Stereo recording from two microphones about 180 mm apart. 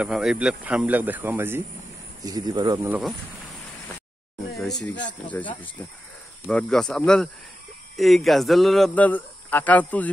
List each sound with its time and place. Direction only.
0.0 s speech: centre (ahead or behind)
2.2 s speech: 20° right (ahead or behind)
5.2 s speech: 10° left (ahead or behind)